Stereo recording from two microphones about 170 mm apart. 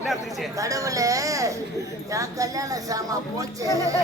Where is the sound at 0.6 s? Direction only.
20° right (ahead or behind).